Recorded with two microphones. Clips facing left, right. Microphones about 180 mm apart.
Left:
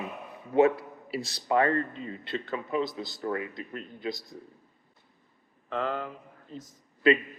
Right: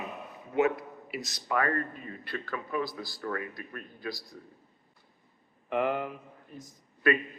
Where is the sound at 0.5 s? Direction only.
30° left (ahead or behind).